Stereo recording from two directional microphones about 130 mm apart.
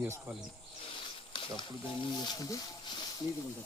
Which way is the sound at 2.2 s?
30° left (ahead or behind).